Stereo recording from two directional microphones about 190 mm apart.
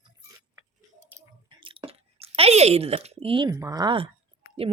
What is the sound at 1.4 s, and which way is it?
Chewing, 25° right (ahead or behind).